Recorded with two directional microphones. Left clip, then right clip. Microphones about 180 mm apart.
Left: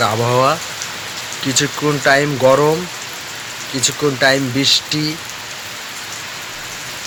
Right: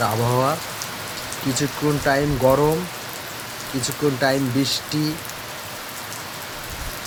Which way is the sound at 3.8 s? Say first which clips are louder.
Left 6 dB; 15° left (ahead or behind).